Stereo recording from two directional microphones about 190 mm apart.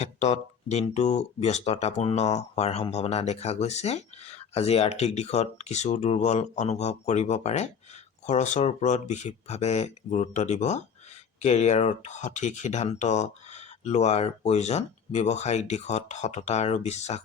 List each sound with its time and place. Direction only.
0.0 s speech: 35° left (ahead or behind)